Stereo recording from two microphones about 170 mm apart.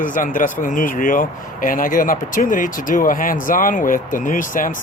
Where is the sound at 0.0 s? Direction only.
50° left (ahead or behind).